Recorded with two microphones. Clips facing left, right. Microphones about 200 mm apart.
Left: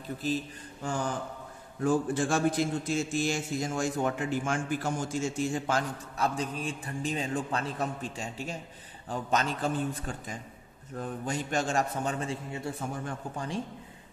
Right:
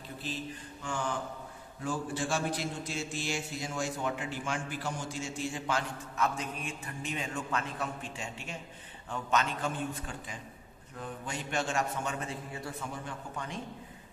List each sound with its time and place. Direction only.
0.8 s a man's voice: 40° left (ahead or behind)
1.8 s a man's voice: 50° left (ahead or behind); by 12.7 s 25° left (ahead or behind)